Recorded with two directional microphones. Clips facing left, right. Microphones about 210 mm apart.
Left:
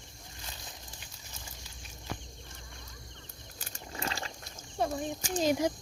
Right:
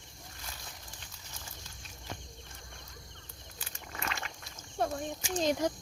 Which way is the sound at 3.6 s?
35° left (ahead or behind).